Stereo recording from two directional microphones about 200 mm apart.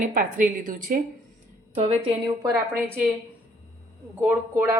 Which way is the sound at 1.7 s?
30° right (ahead or behind).